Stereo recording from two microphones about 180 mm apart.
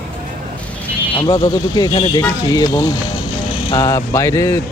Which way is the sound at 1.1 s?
25° left (ahead or behind).